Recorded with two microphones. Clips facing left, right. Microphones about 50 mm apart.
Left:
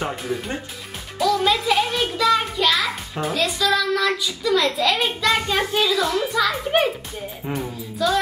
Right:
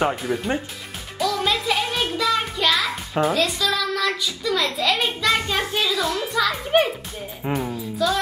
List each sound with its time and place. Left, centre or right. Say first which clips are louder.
0.3 s speech: right 1 dB; right
1.1 s music: left 3 dB; centre
3.2 s a child's voice: right 2 dB; centre
7.5 s music: right 4 dB; centre